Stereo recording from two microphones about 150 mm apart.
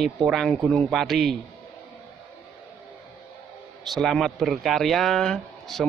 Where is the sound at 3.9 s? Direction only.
Centre (ahead or behind).